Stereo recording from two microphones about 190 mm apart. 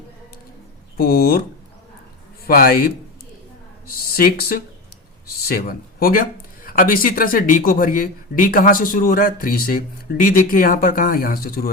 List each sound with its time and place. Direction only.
0.9 s speech: 55° left (ahead or behind)
2.5 s speech: 50° left (ahead or behind)